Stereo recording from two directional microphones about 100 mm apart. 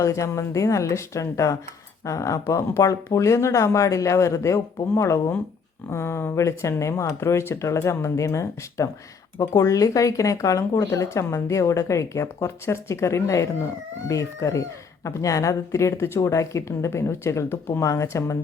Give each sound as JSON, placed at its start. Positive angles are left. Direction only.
{"t": 0.0, "sound": "speech", "side_deg": 30}